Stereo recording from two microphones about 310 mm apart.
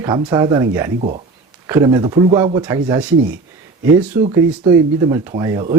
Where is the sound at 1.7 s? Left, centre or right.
Centre.